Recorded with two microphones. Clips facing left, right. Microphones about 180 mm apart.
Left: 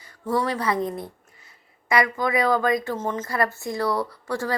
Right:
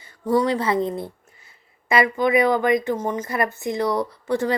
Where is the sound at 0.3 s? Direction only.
20° right (ahead or behind).